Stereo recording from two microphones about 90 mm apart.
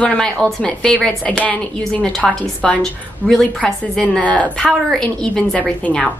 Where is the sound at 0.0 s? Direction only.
10° left (ahead or behind).